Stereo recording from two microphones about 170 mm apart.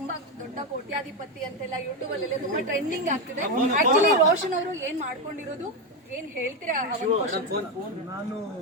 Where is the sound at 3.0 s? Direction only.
45° right (ahead or behind).